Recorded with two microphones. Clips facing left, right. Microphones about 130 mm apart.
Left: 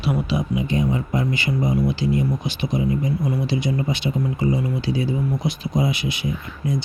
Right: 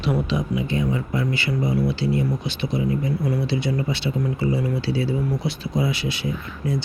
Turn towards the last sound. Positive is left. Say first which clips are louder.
# left 1 dB
turn(degrees=15)  # may be behind; listen again after turning